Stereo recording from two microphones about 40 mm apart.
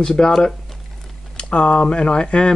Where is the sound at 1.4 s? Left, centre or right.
Left.